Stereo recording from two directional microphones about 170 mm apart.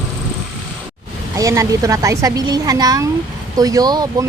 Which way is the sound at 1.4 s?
20° right (ahead or behind).